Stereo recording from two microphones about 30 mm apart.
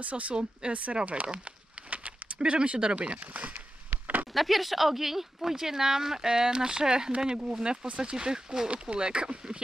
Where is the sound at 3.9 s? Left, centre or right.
Right.